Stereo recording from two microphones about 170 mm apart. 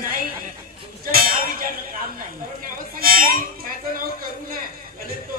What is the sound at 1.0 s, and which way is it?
Music, 55° right (ahead or behind).